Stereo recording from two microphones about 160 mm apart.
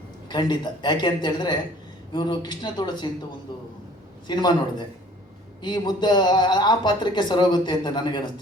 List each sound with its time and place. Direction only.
0.3 s speech: 30° left (ahead or behind)
4.3 s speech: 25° left (ahead or behind)